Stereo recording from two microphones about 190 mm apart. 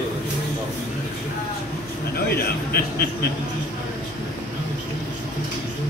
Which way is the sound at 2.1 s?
55° left (ahead or behind).